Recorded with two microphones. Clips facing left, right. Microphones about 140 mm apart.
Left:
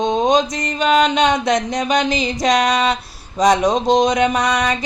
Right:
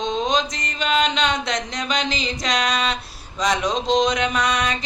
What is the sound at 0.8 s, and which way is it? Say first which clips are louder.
Mantra: left 6 dB; 50° left (ahead or behind).